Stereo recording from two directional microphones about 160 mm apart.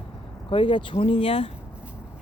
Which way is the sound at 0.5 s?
30° left (ahead or behind).